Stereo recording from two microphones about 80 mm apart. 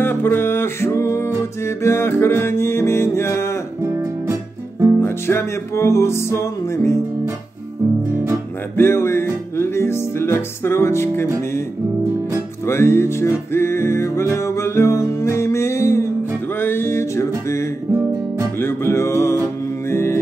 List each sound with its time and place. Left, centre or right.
0.0 s music: left
3.8 s music: right
5.0 s music: left
8.7 s music: left
12.6 s music: left
18.6 s music: left